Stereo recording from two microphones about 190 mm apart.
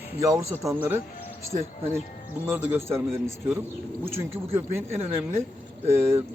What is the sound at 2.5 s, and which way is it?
Speech, 10° right (ahead or behind).